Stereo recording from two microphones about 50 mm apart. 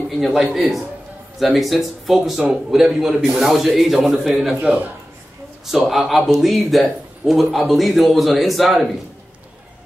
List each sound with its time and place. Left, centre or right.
0.2 s a man's voice: centre
4.6 s a man's voice: right
5.7 s a man's voice: centre